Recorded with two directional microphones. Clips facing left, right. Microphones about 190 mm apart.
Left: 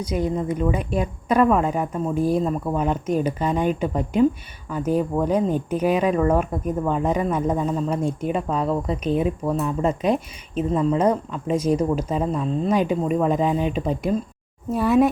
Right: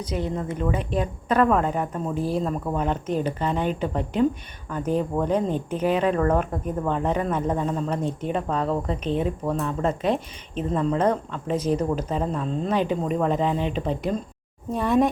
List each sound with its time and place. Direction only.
0.0 s speech: 10° left (ahead or behind)